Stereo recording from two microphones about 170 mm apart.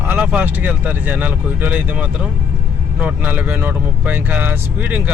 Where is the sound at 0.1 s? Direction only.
10° right (ahead or behind).